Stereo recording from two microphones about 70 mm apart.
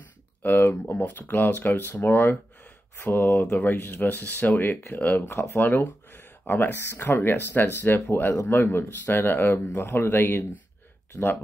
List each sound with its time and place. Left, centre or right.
0.4 s speech: left